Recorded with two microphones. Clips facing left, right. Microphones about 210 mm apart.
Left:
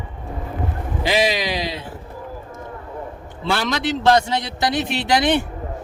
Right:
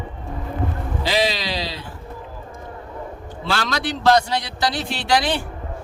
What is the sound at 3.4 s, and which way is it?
A man's voice, 20° left (ahead or behind).